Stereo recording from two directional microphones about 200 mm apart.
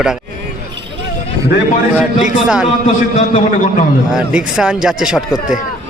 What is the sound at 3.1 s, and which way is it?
Speech, 40° left (ahead or behind).